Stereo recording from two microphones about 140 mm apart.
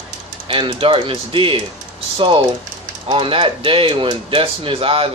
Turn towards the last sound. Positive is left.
turn(degrees=-40)  # may be behind; listen again after turning